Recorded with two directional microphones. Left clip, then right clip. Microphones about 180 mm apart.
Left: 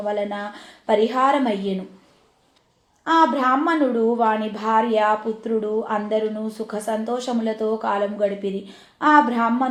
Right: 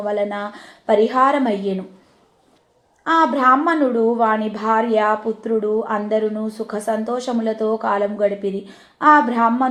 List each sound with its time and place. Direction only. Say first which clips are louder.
0.0 s a woman's voice: right 3 dB; 35° right (ahead or behind)
3.0 s a woman's voice: right 2 dB; 35° right (ahead or behind)